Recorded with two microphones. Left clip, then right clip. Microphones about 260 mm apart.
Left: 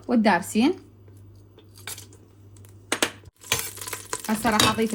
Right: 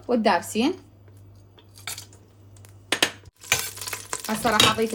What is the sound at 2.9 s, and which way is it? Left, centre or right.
Stir, centre.